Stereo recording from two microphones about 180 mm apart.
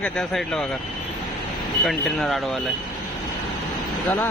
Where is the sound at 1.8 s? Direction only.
Centre (ahead or behind).